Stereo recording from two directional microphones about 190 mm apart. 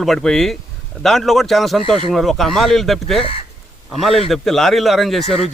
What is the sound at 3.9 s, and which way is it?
A man's voice, centre (ahead or behind).